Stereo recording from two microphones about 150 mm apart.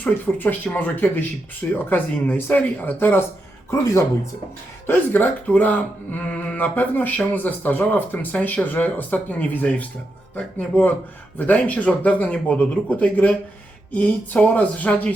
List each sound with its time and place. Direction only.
0.0 s speech: 10° left (ahead or behind)